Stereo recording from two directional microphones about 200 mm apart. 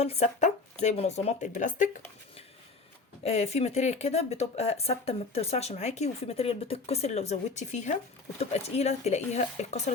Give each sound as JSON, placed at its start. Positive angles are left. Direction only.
{"t": 0.0, "sound": "speech", "side_deg": 30}
{"t": 3.2, "sound": "speech", "side_deg": 35}